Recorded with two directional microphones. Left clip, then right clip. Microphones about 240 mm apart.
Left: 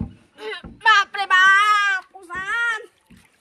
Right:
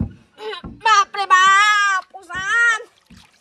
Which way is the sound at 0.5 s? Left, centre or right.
Right.